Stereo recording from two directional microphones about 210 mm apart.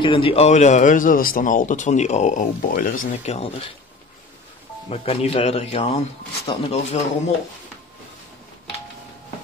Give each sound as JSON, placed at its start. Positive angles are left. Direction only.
{"t": 0.0, "sound": "a man's voice", "side_deg": 25}
{"t": 4.8, "sound": "speech", "side_deg": 30}